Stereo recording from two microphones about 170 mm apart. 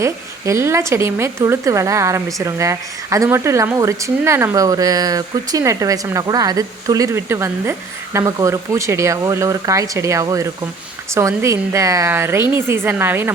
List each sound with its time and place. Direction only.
0.0 s a woman's voice: 15° right (ahead or behind)